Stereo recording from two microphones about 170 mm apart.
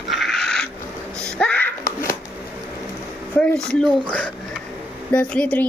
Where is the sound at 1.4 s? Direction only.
5° left (ahead or behind).